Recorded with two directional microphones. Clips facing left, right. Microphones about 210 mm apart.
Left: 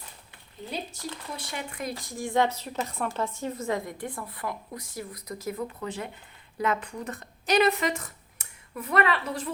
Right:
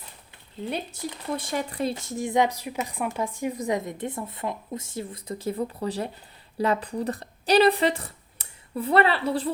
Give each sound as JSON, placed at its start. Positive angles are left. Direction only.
{"t": 0.6, "sound": "speech", "side_deg": -60}
{"t": 1.4, "sound": "speech", "side_deg": -50}
{"t": 1.7, "sound": "a woman's voice", "side_deg": -30}